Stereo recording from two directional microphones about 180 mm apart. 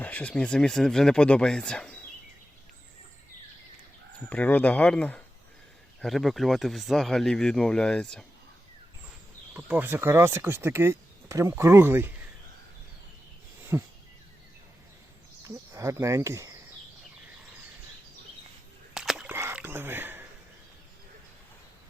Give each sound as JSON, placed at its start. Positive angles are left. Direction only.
{"t": 0.0, "sound": "speech", "side_deg": 10}
{"t": 4.3, "sound": "speech", "side_deg": 10}
{"t": 9.6, "sound": "speech", "side_deg": -10}
{"t": 13.7, "sound": "speech", "side_deg": -15}
{"t": 15.4, "sound": "speech", "side_deg": -15}
{"t": 18.9, "sound": "a sound", "side_deg": -5}
{"t": 19.3, "sound": "a sound", "side_deg": -15}